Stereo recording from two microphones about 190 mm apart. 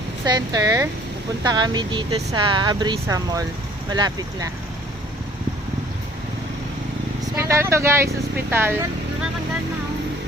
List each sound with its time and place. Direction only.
0.3 s speech: 20° right (ahead or behind)
7.3 s speech: 15° right (ahead or behind)